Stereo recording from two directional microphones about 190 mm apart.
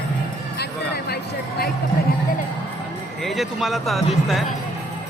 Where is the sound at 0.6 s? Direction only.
60° left (ahead or behind).